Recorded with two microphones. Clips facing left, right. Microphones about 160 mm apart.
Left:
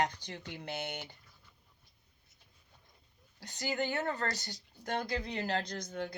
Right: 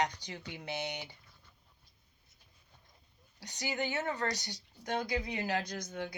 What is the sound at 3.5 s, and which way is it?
Speech, 45° left (ahead or behind).